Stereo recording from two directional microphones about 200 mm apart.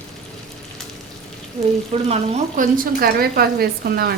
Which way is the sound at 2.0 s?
30° right (ahead or behind).